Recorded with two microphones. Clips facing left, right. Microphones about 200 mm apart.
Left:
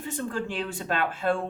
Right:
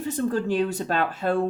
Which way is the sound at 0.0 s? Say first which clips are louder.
Right 6 dB; 40° right (ahead or behind).